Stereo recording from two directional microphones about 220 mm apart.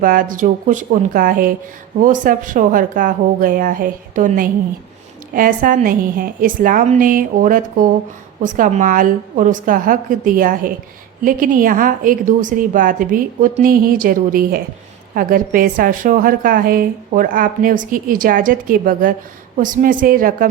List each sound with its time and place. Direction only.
0.0 s a woman's voice: 40° right (ahead or behind)